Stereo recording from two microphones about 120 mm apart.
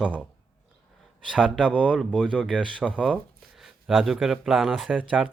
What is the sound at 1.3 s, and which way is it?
Speech, 5° left (ahead or behind).